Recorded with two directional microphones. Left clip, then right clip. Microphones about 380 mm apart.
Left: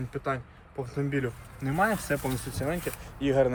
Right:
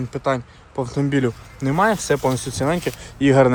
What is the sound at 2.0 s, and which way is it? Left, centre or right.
Speech, centre.